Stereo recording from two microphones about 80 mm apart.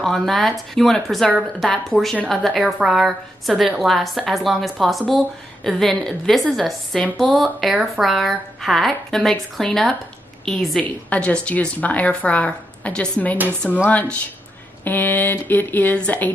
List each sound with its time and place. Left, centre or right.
0.0 s a woman's voice: centre
10.8 s a woman's voice: centre